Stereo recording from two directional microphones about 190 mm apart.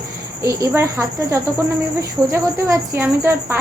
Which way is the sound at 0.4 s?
15° right (ahead or behind).